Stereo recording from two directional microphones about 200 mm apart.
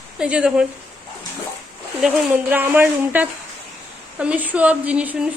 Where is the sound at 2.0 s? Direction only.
5° right (ahead or behind).